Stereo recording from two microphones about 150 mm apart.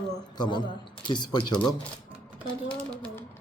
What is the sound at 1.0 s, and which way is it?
Speech, 30° left (ahead or behind).